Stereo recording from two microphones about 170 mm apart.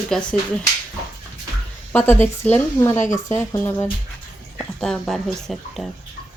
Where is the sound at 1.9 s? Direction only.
15° left (ahead or behind).